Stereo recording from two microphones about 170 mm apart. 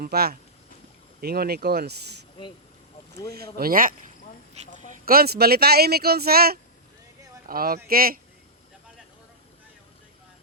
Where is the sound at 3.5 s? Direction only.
60° right (ahead or behind).